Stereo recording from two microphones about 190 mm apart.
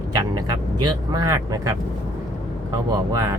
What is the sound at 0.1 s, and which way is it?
Vehicle, 20° right (ahead or behind).